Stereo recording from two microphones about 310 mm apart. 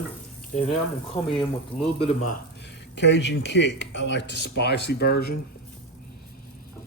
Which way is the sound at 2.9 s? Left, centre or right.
Left.